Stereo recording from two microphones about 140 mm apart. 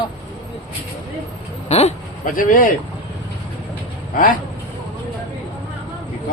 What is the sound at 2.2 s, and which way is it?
Speech, 75° left (ahead or behind).